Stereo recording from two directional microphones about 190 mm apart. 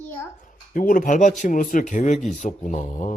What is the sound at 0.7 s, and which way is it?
Speech, 45° left (ahead or behind).